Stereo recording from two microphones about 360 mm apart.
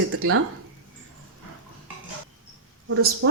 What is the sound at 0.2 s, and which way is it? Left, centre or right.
Speech, right.